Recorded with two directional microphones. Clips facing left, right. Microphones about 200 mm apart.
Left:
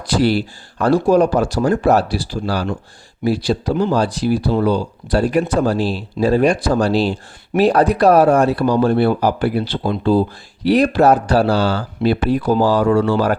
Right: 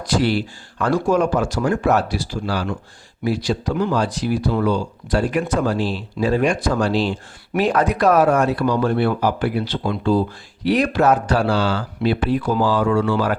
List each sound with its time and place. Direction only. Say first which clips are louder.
0.0 s speech: left 3 dB; 35° left (ahead or behind)